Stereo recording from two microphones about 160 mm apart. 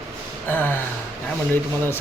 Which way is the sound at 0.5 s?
10° left (ahead or behind).